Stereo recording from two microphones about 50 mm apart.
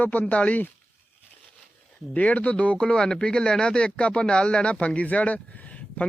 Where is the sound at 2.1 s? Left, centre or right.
Left.